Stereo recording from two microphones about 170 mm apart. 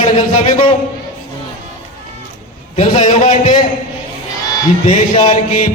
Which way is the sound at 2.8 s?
40° left (ahead or behind).